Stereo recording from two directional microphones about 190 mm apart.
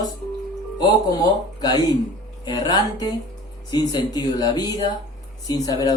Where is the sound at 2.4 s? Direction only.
20° left (ahead or behind).